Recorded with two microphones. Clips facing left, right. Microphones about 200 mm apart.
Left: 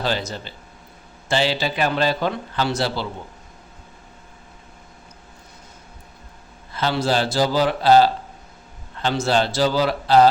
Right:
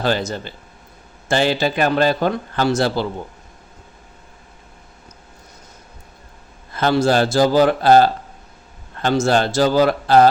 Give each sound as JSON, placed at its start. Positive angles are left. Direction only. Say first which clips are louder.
{"t": 0.0, "sound": "a man's voice", "louder": "right 4 dB", "side_deg": -50}
{"t": 6.7, "sound": "a man's voice", "louder": "right 5 dB", "side_deg": -50}